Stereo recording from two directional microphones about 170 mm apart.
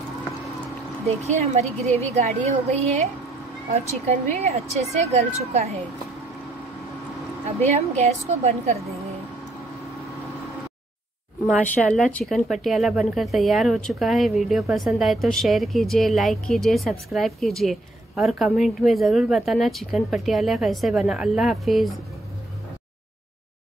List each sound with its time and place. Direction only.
1.0 s a woman's voice: 40° right (ahead or behind)
7.4 s a woman's voice: 40° right (ahead or behind)
11.6 s a woman's voice: 10° left (ahead or behind)